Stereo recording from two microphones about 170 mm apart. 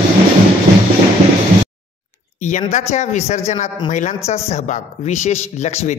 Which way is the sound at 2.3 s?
45° left (ahead or behind).